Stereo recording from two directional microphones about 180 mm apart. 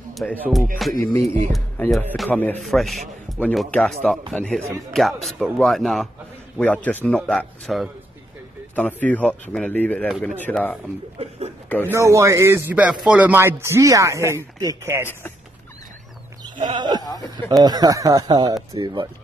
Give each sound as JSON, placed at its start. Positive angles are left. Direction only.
{"t": 0.1, "sound": "music", "side_deg": 5}
{"t": 0.4, "sound": "a man's voice", "side_deg": 0}
{"t": 10.4, "sound": "speech", "side_deg": 10}
{"t": 11.1, "sound": "speech", "side_deg": -35}
{"t": 11.8, "sound": "speech", "side_deg": -15}
{"t": 16.5, "sound": "speech", "side_deg": -25}
{"t": 17.0, "sound": "speech", "side_deg": 20}
{"t": 17.6, "sound": "speech", "side_deg": -20}